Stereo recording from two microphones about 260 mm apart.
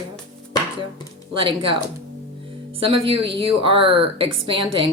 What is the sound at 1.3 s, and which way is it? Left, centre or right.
Speech, centre.